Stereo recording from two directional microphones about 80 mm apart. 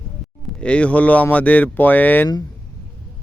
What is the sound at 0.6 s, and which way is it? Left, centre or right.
Speech, centre.